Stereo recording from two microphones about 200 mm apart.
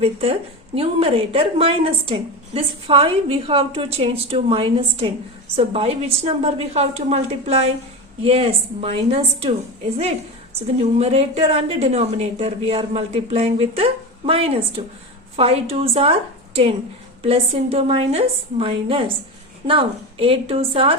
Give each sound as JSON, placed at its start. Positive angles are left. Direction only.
{"t": 0.0, "sound": "a woman's voice", "side_deg": -30}
{"t": 10.9, "sound": "a woman's voice", "side_deg": -30}
{"t": 17.2, "sound": "a woman's voice", "side_deg": -30}